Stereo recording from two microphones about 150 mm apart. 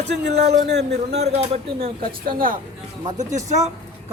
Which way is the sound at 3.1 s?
50° right (ahead or behind).